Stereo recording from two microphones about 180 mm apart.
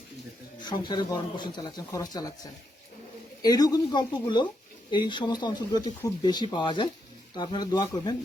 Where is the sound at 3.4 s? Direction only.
20° left (ahead or behind).